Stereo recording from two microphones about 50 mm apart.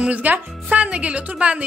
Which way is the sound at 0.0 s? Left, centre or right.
Right.